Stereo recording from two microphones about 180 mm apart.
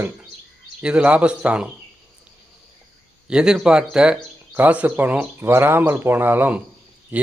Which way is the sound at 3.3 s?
5° right (ahead or behind).